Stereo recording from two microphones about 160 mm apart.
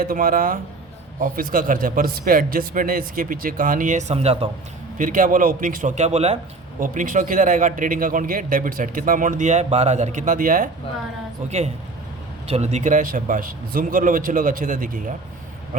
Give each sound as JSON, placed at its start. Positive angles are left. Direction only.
{"t": 0.0, "sound": "a man's voice", "side_deg": -60}
{"t": 4.9, "sound": "a man's voice", "side_deg": -55}
{"t": 6.7, "sound": "a man's voice", "side_deg": -60}
{"t": 11.4, "sound": "a man's voice", "side_deg": -45}
{"t": 15.7, "sound": "a sound", "side_deg": -55}